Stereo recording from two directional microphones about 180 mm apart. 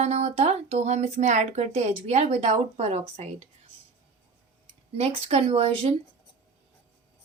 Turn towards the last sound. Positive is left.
turn(degrees=-35)  # may be behind; listen again after turning